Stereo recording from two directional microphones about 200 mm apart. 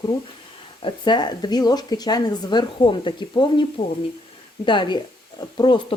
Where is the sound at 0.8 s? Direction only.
20° left (ahead or behind).